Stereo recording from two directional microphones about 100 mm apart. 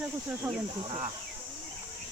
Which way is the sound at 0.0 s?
15° right (ahead or behind).